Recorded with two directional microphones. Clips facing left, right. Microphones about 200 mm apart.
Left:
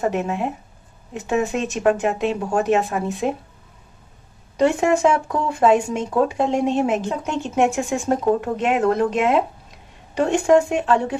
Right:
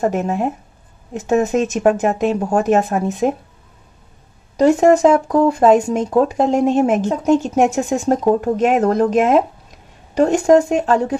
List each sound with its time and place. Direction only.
0.0 s speech: 40° right (ahead or behind)
4.6 s speech: 40° right (ahead or behind)